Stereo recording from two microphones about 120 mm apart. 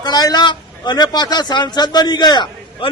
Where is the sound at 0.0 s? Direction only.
35° left (ahead or behind).